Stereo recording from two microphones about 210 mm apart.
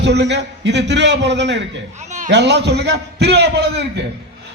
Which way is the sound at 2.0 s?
35° right (ahead or behind).